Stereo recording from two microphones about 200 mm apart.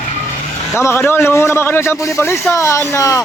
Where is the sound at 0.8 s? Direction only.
15° left (ahead or behind).